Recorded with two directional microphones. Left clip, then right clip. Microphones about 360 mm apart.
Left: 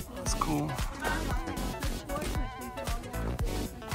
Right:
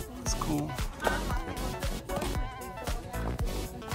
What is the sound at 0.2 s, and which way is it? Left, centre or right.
Music, centre.